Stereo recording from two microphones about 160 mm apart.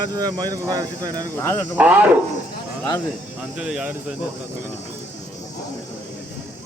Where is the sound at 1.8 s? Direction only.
10° right (ahead or behind).